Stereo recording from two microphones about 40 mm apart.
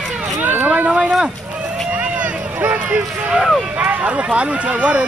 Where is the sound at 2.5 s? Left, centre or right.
Right.